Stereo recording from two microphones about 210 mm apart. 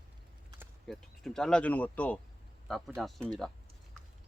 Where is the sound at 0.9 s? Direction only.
Centre (ahead or behind).